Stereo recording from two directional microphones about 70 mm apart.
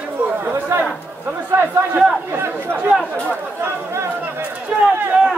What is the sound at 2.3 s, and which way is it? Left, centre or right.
Chatter, right.